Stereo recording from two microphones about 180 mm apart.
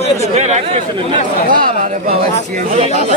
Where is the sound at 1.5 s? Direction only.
50° right (ahead or behind).